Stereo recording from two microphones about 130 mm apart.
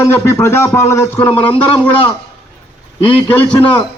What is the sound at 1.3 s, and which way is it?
Speech, 45° left (ahead or behind).